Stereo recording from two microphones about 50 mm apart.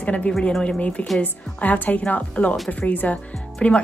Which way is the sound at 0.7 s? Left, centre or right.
Left.